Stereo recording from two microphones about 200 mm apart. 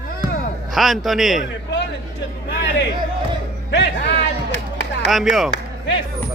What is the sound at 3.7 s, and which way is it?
Music, 60° left (ahead or behind).